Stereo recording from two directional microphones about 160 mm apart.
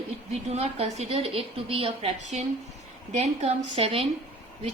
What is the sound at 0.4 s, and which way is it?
A woman's voice, 45° right (ahead or behind).